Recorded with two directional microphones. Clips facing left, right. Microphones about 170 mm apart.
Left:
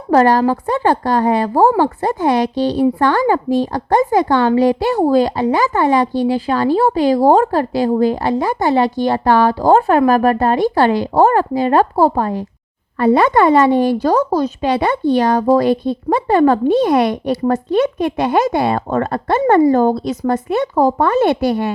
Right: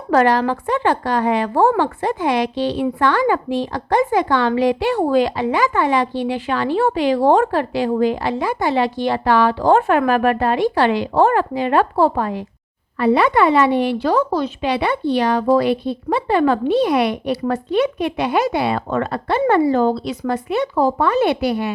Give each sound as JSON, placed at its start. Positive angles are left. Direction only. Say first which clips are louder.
{"t": 0.1, "sound": "a woman's voice", "louder": "left 3 dB", "side_deg": 40}